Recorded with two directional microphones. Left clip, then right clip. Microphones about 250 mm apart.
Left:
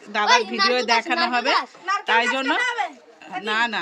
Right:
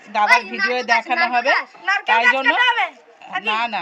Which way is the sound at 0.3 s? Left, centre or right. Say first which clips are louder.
Right 1 dB; left.